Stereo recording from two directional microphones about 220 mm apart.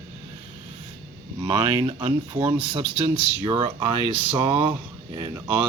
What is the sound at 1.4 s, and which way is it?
Speech, 15° right (ahead or behind).